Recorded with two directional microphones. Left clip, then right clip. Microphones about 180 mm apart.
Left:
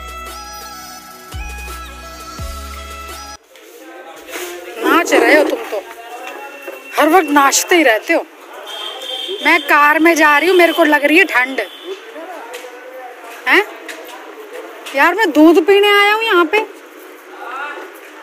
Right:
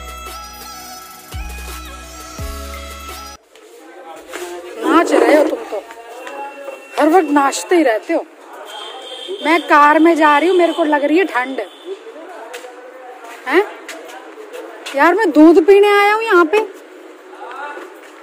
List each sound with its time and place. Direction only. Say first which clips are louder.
4.8 s music: left 1 dB; 15° right (ahead or behind)
6.9 s a woman's voice: left 1 dB; 10° right (ahead or behind)
9.4 s a woman's voice: even; 10° right (ahead or behind)
11.0 s a woman's voice: left 4 dB; 15° right (ahead or behind)
13.5 s a woman's voice: left 3 dB; 15° right (ahead or behind)
15.0 s speech: even; 25° right (ahead or behind)